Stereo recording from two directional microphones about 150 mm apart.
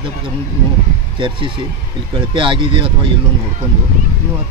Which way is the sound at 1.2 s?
35° right (ahead or behind).